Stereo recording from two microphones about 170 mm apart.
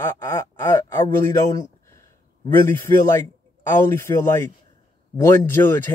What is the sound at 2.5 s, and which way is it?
Speech, 15° left (ahead or behind).